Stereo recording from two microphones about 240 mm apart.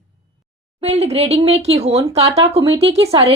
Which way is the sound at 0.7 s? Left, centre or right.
Right.